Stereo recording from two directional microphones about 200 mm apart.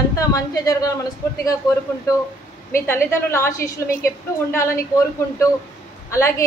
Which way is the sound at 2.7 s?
10° left (ahead or behind).